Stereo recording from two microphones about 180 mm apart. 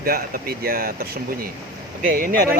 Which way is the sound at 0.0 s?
55° right (ahead or behind).